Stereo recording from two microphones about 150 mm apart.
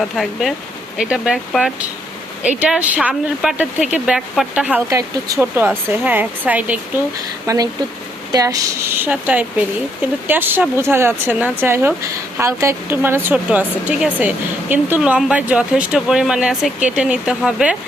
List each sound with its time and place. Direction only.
0.0 s speech: centre (ahead or behind)
4.9 s speech: 20° right (ahead or behind)
7.4 s speech: 25° right (ahead or behind)
9.0 s speech: 10° right (ahead or behind)